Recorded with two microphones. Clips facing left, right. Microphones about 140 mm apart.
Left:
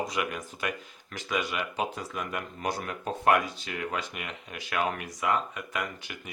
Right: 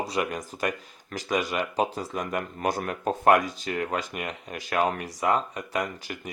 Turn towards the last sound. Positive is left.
turn(degrees=-40)  # may be behind; listen again after turning